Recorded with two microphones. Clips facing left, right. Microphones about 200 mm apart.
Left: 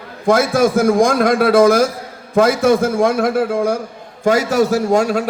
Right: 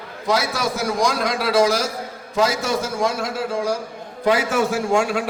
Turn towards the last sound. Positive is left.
turn(degrees=40)  # may be behind; listen again after turning